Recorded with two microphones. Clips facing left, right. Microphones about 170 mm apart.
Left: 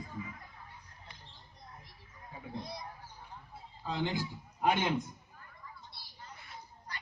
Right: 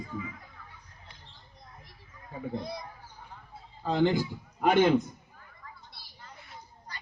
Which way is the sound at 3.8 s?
70° right (ahead or behind).